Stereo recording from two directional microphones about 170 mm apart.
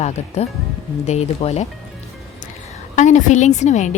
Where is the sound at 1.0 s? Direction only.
40° left (ahead or behind).